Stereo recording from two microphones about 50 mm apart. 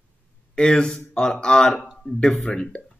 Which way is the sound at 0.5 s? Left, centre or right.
Centre.